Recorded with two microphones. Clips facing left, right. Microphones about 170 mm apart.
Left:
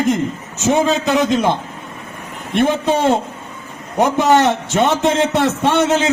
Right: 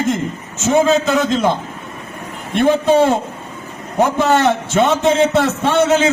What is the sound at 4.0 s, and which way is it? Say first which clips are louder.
A man's voice: left 1 dB; 20° left (ahead or behind).